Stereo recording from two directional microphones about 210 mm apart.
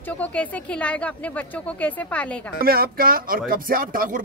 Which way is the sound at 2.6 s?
45° right (ahead or behind).